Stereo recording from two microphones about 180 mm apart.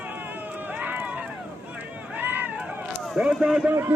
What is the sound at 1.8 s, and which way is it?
Speech, 10° right (ahead or behind).